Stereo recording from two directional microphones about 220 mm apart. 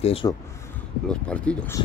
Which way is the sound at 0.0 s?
25° left (ahead or behind).